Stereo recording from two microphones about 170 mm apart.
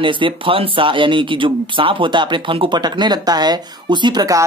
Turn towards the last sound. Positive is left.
turn(degrees=-25)  # may be behind; listen again after turning